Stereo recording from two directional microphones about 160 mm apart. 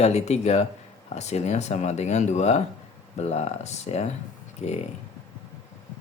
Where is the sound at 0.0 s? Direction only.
45° left (ahead or behind).